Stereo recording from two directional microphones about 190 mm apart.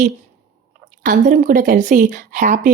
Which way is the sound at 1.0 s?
45° right (ahead or behind).